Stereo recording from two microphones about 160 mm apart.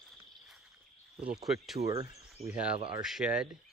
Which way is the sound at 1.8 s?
20° right (ahead or behind).